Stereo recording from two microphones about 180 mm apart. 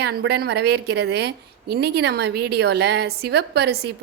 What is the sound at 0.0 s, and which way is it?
A woman's voice, 65° right (ahead or behind).